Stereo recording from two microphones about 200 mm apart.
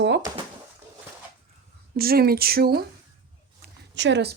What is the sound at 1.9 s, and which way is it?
Speech, 50° right (ahead or behind).